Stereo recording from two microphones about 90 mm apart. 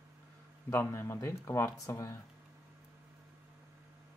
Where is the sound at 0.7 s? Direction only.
30° left (ahead or behind).